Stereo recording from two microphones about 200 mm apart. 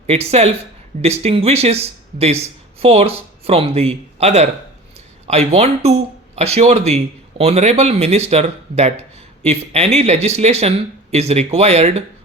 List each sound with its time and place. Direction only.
0.1 s speech: 30° right (ahead or behind)